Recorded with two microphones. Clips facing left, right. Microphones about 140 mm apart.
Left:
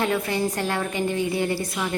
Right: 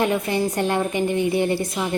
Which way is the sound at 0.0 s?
20° right (ahead or behind).